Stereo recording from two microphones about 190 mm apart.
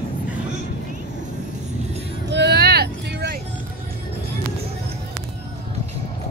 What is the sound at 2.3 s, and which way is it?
Vehicle, 65° right (ahead or behind).